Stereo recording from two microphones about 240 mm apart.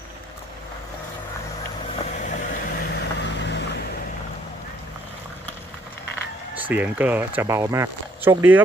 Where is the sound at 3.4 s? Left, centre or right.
Left.